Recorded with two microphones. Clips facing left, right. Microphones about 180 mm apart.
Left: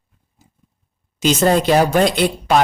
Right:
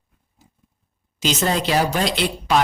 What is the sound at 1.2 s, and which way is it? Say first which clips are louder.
A woman's voice: left 7 dB; 50° left (ahead or behind).